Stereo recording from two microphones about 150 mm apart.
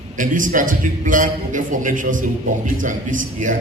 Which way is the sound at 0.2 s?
65° right (ahead or behind).